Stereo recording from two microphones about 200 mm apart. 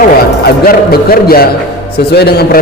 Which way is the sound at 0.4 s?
50° left (ahead or behind).